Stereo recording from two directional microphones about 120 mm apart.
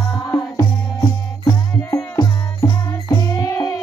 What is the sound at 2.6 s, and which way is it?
Music, 25° left (ahead or behind).